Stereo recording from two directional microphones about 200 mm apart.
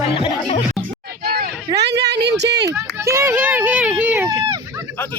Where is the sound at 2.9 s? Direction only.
15° right (ahead or behind).